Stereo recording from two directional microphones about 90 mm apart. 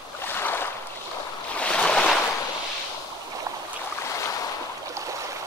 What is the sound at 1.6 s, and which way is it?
Boat, 10° left (ahead or behind).